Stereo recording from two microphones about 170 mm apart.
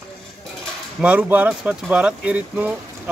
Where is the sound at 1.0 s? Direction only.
5° right (ahead or behind).